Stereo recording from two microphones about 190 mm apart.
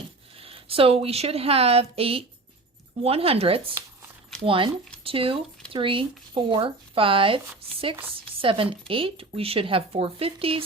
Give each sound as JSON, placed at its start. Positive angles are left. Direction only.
{"t": 0.3, "sound": "speech", "side_deg": -30}